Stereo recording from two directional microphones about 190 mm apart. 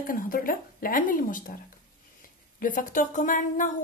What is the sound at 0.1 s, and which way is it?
Speech, 45° left (ahead or behind).